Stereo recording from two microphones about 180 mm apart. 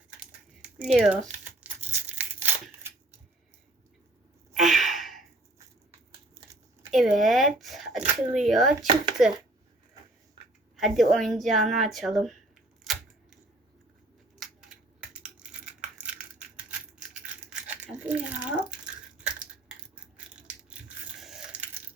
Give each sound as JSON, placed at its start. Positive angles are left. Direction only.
{"t": 0.8, "sound": "crumpling", "side_deg": -5}
{"t": 1.9, "sound": "tearing", "side_deg": -40}
{"t": 4.5, "sound": "gasp", "side_deg": 0}
{"t": 6.9, "sound": "a sound", "side_deg": 0}
{"t": 8.3, "sound": "speech", "side_deg": 0}
{"t": 10.8, "sound": "speech", "side_deg": 0}
{"t": 14.3, "sound": "coin", "side_deg": -5}
{"t": 17.2, "sound": "a sound", "side_deg": -5}
{"t": 20.1, "sound": "crushing", "side_deg": -5}